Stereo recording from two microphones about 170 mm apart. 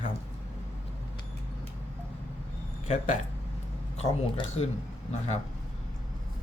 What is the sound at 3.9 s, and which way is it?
Speech, 40° left (ahead or behind).